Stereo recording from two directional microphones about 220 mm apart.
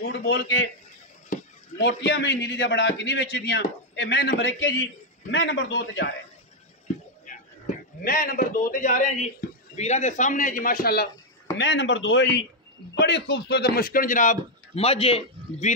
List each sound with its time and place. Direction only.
0.1 s speech: 55° left (ahead or behind)
1.3 s a sound: 35° left (ahead or behind)
1.8 s a man's voice: 55° left (ahead or behind)
8.0 s a man's voice: 40° left (ahead or behind)
11.5 s a man's voice: 55° left (ahead or behind); by 15.7 s 25° left (ahead or behind)